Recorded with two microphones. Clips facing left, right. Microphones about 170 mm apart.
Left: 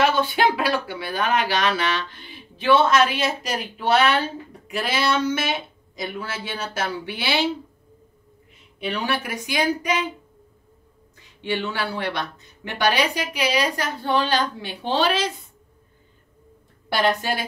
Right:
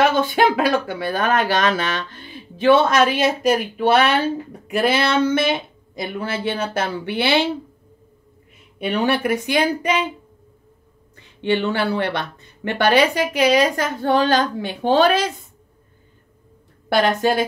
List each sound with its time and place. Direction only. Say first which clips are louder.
0.1 s speech: right 3 dB; 50° right (ahead or behind)
8.7 s speech: right 6 dB; 55° right (ahead or behind)
11.1 s speech: right 6 dB; 60° right (ahead or behind)
17.2 s speech: right 8 dB; 50° right (ahead or behind)